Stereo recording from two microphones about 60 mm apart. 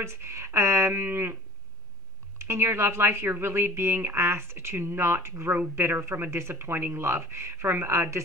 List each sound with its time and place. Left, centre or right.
0.0 s speech: right
0.9 s a sound: right
2.3 s speech: right